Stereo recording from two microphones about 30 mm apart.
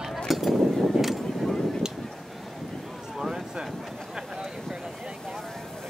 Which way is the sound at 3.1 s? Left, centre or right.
Centre.